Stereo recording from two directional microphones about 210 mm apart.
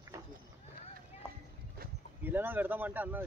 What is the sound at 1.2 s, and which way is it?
Clip-clop, 10° right (ahead or behind).